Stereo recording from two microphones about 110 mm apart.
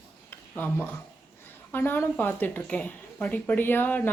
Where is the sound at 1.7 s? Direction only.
20° left (ahead or behind).